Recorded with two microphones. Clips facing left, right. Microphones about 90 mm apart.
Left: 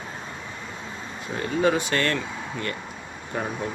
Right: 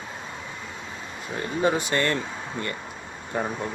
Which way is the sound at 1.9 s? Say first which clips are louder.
Even; 15° right (ahead or behind).